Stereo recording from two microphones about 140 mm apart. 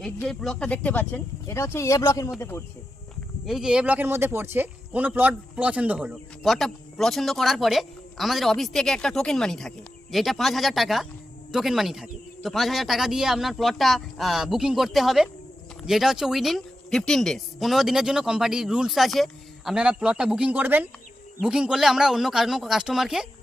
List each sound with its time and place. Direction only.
0.3 s speech: 5° left (ahead or behind)
3.4 s speech: centre (ahead or behind)